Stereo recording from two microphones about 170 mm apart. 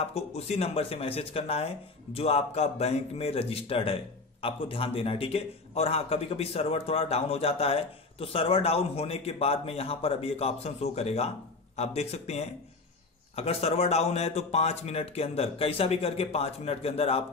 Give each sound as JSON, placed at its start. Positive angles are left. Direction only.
{"t": 0.0, "sound": "a man's voice", "side_deg": 35}